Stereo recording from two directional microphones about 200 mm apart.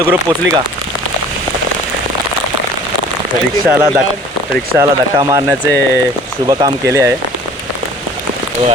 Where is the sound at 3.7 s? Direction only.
10° right (ahead or behind).